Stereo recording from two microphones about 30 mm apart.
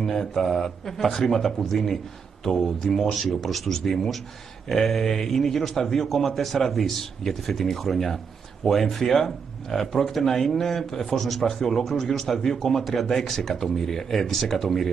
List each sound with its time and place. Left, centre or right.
0.0 s speech: centre
3.6 s speech: centre
4.6 s speech: centre